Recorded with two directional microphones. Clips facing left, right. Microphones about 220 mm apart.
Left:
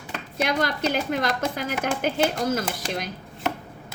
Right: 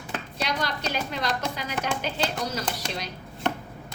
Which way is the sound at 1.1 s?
50° left (ahead or behind).